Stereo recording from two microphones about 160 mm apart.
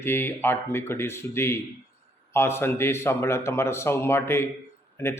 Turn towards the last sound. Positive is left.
turn(degrees=15)  # may be behind; listen again after turning